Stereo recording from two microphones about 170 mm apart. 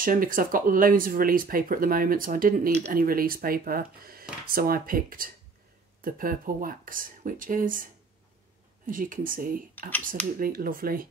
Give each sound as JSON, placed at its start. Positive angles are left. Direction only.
{"t": 0.0, "sound": "speech", "side_deg": -55}